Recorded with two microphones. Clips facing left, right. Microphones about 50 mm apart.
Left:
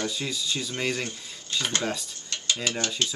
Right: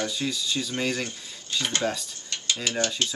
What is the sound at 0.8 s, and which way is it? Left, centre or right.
Speech, left.